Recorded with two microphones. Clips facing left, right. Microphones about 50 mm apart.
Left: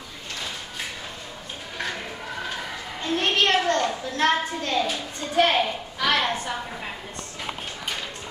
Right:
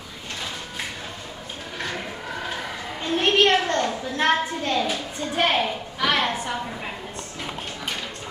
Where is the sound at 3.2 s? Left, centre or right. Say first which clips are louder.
Right 3 dB; centre.